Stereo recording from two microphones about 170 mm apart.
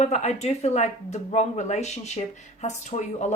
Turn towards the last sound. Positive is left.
turn(degrees=45)  # may be behind; listen again after turning